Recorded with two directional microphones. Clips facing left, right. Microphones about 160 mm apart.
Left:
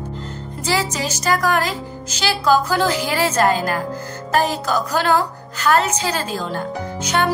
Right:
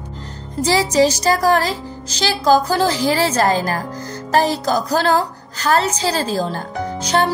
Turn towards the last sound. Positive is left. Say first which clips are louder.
# right 2 dB
turn(degrees=-35)  # may be behind; listen again after turning